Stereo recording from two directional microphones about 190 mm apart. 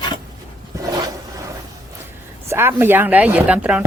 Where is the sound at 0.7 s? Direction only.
15° right (ahead or behind).